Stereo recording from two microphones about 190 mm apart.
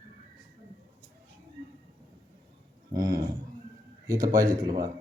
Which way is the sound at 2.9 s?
20° right (ahead or behind).